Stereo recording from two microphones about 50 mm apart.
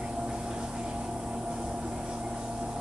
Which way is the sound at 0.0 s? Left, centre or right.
Centre.